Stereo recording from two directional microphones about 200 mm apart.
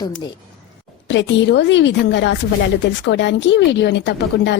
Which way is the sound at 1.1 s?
65° left (ahead or behind).